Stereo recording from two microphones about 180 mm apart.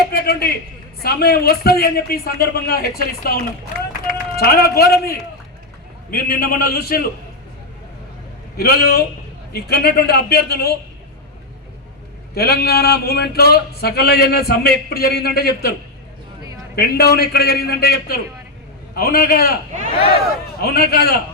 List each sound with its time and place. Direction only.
0.1 s a sound: 60° left (ahead or behind)
1.0 s a man's voice: 60° left (ahead or behind)
8.5 s a man's voice: 60° left (ahead or behind)
12.3 s a man's voice: 60° left (ahead or behind)
16.7 s a man's voice: 60° left (ahead or behind)
20.6 s a man's voice: 60° left (ahead or behind)